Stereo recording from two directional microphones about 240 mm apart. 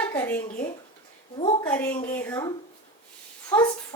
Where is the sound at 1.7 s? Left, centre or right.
Centre.